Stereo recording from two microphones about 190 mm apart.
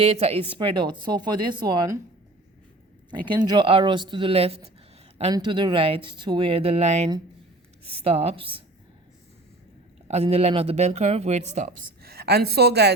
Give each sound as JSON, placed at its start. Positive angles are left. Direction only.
{"t": 0.0, "sound": "speech", "side_deg": -35}
{"t": 3.2, "sound": "speech", "side_deg": -20}
{"t": 10.1, "sound": "speech", "side_deg": -35}
{"t": 12.0, "sound": "a woman's voice", "side_deg": -55}